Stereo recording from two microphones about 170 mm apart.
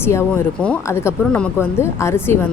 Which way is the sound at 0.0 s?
15° left (ahead or behind).